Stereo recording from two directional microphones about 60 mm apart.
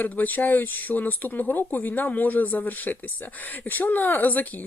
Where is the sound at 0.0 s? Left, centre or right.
Left.